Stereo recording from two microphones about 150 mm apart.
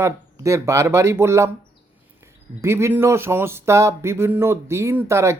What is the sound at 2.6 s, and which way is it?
Speech, 15° right (ahead or behind).